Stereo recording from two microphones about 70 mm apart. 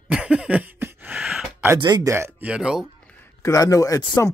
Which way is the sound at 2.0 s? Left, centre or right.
Right.